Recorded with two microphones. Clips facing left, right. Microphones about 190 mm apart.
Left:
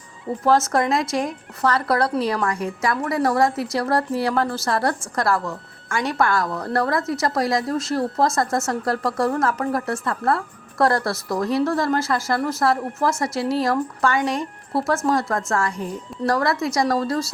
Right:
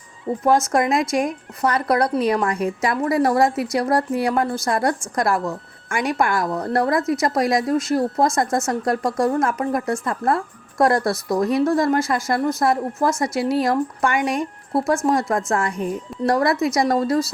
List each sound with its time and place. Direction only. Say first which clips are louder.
0.4 s a woman's voice: right 1 dB; 20° right (ahead or behind)